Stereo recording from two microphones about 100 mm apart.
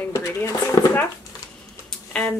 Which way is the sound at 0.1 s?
30° left (ahead or behind).